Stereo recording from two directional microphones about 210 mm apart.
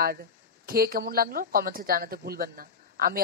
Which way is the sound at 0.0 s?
45° right (ahead or behind).